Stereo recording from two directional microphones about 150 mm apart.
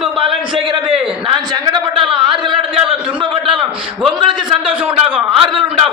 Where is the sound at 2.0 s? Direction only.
35° right (ahead or behind).